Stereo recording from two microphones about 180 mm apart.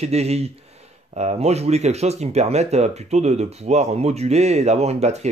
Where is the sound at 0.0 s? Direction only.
35° right (ahead or behind).